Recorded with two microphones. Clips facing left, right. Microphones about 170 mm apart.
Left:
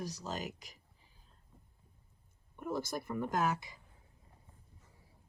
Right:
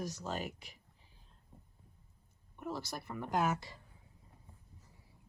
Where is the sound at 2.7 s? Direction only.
50° left (ahead or behind).